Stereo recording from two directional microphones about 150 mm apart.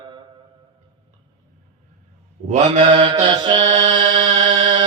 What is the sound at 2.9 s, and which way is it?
Mantra, 30° right (ahead or behind).